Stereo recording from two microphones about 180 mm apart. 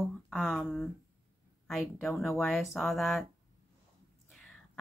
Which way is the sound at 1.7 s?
Centre (ahead or behind).